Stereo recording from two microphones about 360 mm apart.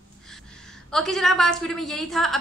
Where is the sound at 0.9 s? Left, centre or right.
Centre.